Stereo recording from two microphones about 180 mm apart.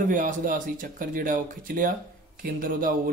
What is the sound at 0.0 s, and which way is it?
Speech, 45° right (ahead or behind).